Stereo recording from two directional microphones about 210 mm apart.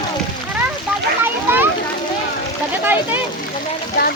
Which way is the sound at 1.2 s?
10° right (ahead or behind).